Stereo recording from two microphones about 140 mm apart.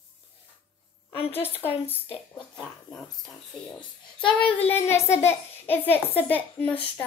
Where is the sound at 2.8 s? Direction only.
5° left (ahead or behind).